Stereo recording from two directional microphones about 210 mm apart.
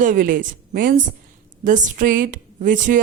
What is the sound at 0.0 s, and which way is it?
Speech, 40° right (ahead or behind).